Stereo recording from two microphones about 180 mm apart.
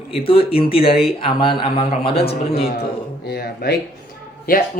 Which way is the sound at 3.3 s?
60° left (ahead or behind).